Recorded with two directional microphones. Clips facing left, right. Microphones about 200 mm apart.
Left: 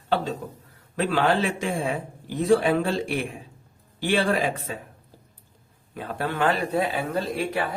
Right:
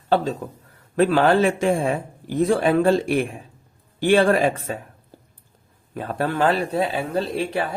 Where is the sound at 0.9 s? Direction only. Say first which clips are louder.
Right 6 dB; 45° right (ahead or behind).